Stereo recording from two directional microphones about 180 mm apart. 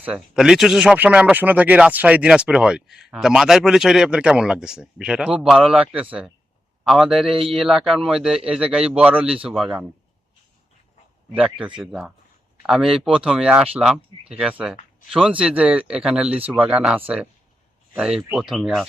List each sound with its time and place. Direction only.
0.0 s speech: 5° right (ahead or behind)
11.3 s speech: 5° right (ahead or behind)